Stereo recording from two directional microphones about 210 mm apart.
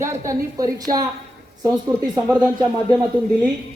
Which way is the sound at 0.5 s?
15° right (ahead or behind).